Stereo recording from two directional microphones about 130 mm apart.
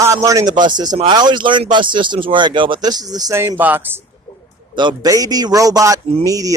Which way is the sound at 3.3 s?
20° right (ahead or behind).